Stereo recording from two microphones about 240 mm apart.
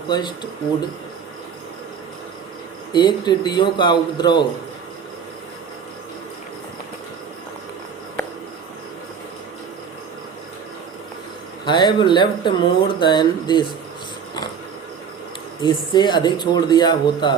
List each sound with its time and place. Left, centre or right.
0.1 s speech: centre
2.9 s speech: centre
11.6 s speech: centre
15.6 s speech: centre